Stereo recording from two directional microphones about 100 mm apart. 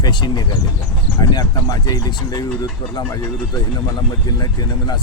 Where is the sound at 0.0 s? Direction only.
45° left (ahead or behind).